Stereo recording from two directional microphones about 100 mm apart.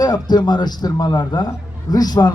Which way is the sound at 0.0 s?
45° left (ahead or behind).